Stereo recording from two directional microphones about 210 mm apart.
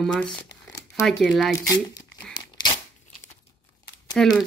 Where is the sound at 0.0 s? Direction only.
5° left (ahead or behind).